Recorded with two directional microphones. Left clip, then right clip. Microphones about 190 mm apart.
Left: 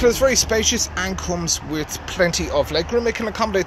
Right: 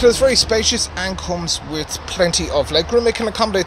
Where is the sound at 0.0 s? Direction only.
10° right (ahead or behind).